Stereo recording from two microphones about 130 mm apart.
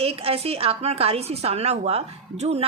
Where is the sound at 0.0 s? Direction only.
50° right (ahead or behind).